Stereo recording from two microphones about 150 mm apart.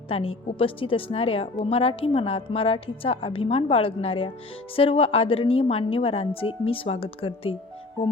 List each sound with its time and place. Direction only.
0.1 s a woman's voice: 40° left (ahead or behind)